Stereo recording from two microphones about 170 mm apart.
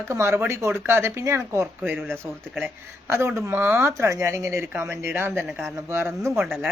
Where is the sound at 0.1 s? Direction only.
15° right (ahead or behind).